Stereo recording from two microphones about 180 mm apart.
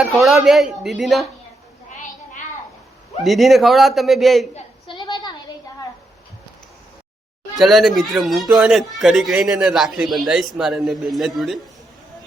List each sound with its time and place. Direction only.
0.0 s speech: centre (ahead or behind)
3.2 s speech: centre (ahead or behind)
4.5 s a sound: 25° left (ahead or behind)
7.5 s speech: centre (ahead or behind)